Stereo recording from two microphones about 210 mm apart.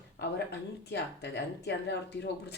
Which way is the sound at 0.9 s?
55° left (ahead or behind).